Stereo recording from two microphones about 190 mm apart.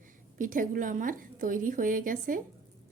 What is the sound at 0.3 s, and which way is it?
A woman's voice, 45° right (ahead or behind).